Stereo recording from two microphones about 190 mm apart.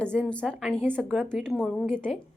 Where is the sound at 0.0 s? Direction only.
5° left (ahead or behind).